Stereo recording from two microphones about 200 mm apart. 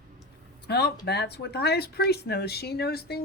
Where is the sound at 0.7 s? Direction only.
55° left (ahead or behind).